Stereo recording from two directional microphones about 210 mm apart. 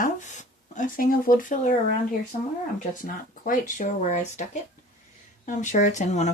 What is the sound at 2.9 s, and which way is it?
Speech, 40° left (ahead or behind).